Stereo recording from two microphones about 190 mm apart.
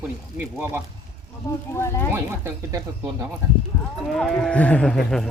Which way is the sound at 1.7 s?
15° left (ahead or behind).